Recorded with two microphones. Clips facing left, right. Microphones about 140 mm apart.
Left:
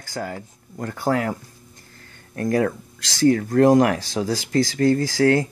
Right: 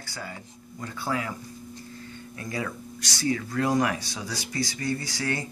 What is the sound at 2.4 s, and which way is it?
Speech, 55° left (ahead or behind).